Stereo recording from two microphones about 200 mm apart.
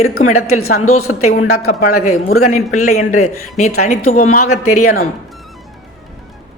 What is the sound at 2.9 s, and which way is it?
Speech, 35° left (ahead or behind).